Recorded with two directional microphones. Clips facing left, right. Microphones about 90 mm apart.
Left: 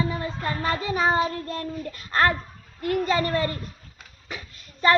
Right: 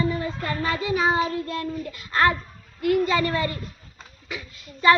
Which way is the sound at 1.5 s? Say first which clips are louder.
Right 2 dB; 40° left (ahead or behind).